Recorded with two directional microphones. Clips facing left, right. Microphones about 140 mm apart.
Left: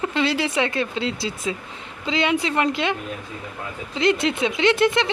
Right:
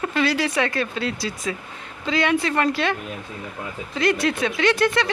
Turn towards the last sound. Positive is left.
turn(degrees=25)  # may be behind; listen again after turning